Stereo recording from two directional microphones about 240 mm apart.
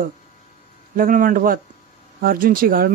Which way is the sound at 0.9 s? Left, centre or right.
Right.